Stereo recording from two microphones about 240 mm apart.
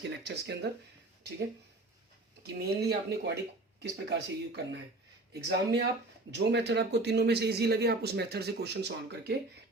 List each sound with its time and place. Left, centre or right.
0.3 s speech: right
2.4 s speech: right